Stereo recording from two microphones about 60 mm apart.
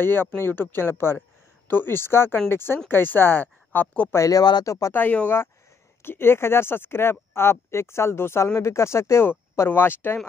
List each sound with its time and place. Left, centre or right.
0.0 s speech: left
4.3 s speech: left
4.9 s speech: left
6.0 s speech: left
9.7 s speech: left